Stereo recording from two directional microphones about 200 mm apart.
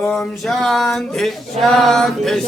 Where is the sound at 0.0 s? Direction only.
Centre (ahead or behind).